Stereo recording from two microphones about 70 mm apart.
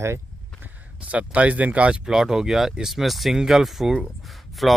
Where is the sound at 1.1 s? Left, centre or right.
Centre.